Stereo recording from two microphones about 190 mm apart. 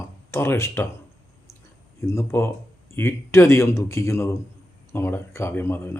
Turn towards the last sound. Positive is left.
turn(degrees=10)  # may be behind; listen again after turning